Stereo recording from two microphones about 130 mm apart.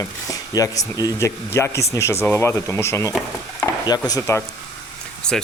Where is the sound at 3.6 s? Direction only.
30° left (ahead or behind).